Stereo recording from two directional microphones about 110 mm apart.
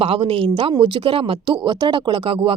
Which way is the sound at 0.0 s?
60° right (ahead or behind).